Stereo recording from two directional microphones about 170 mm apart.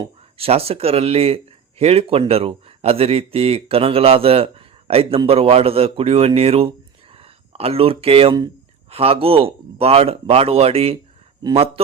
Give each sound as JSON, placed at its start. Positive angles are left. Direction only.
{"t": 0.0, "sound": "speech", "side_deg": -35}